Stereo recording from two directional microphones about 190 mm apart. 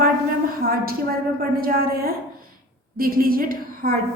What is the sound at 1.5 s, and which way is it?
A woman's voice, 50° right (ahead or behind).